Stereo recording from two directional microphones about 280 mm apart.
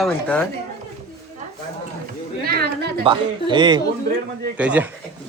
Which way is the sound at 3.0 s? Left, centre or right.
Centre.